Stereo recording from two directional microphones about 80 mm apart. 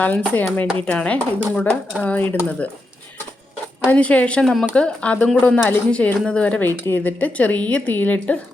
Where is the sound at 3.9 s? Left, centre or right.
Centre.